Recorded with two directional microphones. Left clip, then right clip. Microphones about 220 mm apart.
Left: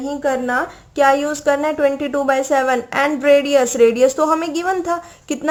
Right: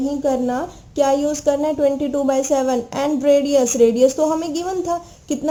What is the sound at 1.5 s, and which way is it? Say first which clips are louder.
Speech: left 1 dB; 5° left (ahead or behind).